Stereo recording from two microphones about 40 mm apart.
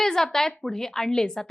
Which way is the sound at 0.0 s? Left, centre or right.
Centre.